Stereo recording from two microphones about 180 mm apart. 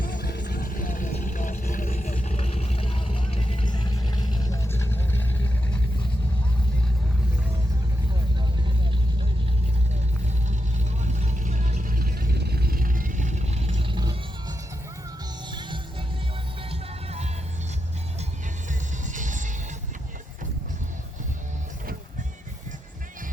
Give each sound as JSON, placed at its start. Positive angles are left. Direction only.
{"t": 0.1, "sound": "vehicle", "side_deg": 70}
{"t": 8.4, "sound": "vehicle", "side_deg": -25}
{"t": 11.0, "sound": "vehicle", "side_deg": -40}
{"t": 16.6, "sound": "music", "side_deg": -35}
{"t": 18.7, "sound": "music", "side_deg": -45}